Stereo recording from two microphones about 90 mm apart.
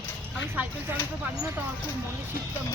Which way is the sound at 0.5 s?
20° right (ahead or behind).